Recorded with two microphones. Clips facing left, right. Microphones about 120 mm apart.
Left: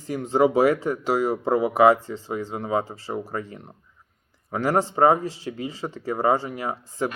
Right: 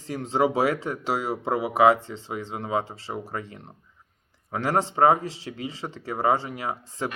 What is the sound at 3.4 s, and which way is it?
Speech, 35° left (ahead or behind).